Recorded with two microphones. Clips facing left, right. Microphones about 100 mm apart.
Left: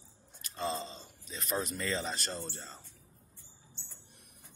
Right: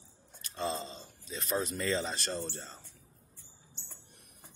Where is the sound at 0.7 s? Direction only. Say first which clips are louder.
Even; 35° right (ahead or behind).